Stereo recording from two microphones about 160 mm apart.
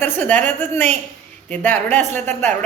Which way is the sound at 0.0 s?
10° left (ahead or behind).